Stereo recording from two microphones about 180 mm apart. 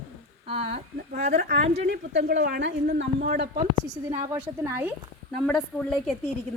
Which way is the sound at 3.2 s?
45° right (ahead or behind).